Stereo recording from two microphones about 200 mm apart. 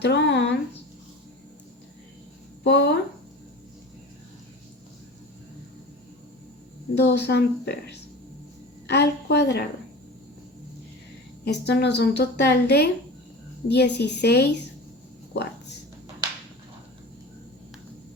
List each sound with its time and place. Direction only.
0.0 s a sound: 60° left (ahead or behind)
2.6 s a woman's voice: 60° left (ahead or behind)
6.9 s a woman's voice: 55° left (ahead or behind)
11.4 s a woman's voice: 55° left (ahead or behind)